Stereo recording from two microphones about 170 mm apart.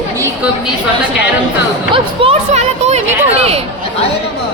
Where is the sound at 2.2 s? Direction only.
40° right (ahead or behind).